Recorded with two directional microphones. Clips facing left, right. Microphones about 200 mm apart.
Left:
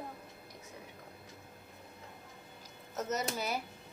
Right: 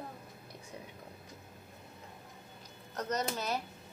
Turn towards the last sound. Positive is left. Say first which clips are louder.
# right 1 dB
turn(degrees=10)  # may be behind; listen again after turning